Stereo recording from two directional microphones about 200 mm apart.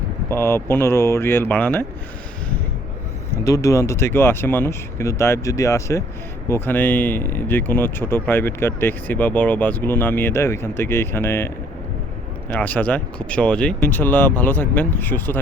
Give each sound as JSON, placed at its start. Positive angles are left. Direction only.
{"t": 0.3, "sound": "speech", "side_deg": 10}
{"t": 3.3, "sound": "speech", "side_deg": 15}